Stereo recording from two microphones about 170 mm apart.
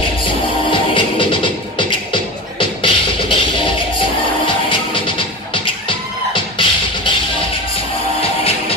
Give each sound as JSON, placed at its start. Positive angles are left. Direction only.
{"t": 0.7, "sound": "music", "side_deg": 30}
{"t": 4.5, "sound": "music", "side_deg": 30}
{"t": 8.2, "sound": "music", "side_deg": 35}